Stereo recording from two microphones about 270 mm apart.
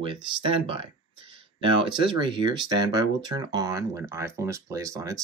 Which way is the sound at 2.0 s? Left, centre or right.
Centre.